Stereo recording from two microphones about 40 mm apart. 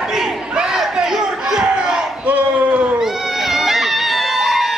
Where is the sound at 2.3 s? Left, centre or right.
Right.